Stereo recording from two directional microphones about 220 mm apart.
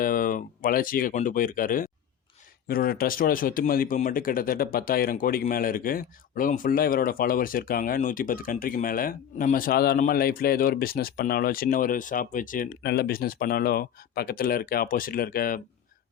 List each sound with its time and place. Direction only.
0.0 s speech: 40° left (ahead or behind)